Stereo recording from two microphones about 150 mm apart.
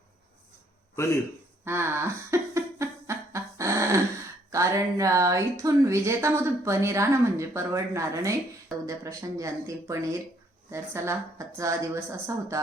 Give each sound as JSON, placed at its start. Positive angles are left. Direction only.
{"t": 0.9, "sound": "a man's voice", "side_deg": 20}
{"t": 1.6, "sound": "a sound", "side_deg": -15}
{"t": 4.5, "sound": "speech", "side_deg": -20}